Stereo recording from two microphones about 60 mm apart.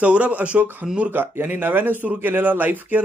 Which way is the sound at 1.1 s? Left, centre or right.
Right.